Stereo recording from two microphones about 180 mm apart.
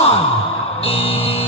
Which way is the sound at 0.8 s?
30° left (ahead or behind).